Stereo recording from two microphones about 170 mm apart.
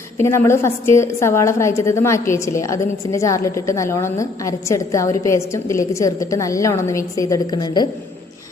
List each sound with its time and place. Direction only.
0.2 s a woman's voice: 15° left (ahead or behind)